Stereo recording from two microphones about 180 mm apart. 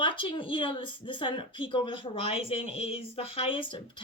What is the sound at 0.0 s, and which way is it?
A woman's voice, 30° left (ahead or behind).